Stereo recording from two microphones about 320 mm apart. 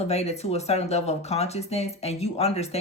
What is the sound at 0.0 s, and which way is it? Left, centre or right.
Speech, centre.